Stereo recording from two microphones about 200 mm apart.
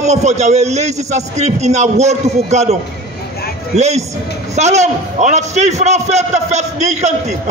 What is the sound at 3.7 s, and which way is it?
A man's voice, 35° right (ahead or behind).